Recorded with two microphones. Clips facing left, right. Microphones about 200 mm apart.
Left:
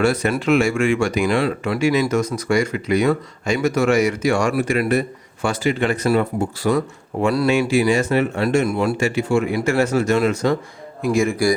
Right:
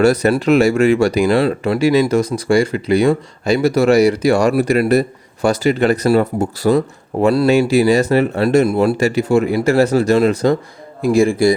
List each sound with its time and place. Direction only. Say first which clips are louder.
0.0 s speech: right 6 dB; 40° right (ahead or behind)